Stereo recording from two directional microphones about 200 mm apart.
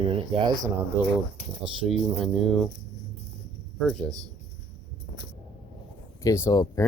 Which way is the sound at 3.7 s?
Centre (ahead or behind).